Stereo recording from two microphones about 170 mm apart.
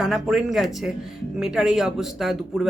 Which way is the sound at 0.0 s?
Centre (ahead or behind).